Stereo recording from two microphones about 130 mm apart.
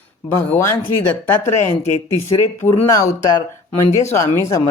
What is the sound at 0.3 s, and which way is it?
Speech, 20° left (ahead or behind).